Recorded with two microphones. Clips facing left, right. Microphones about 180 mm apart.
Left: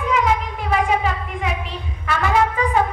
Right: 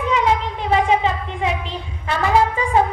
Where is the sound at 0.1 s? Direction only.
30° right (ahead or behind).